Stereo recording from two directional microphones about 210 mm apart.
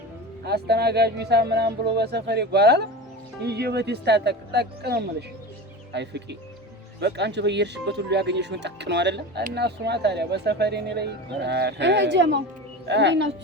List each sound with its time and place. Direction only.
0.4 s speech: 50° right (ahead or behind)